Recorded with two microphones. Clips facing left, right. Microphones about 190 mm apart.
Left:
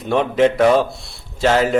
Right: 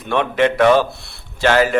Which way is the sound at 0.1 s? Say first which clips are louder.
Left 2 dB; 65° right (ahead or behind).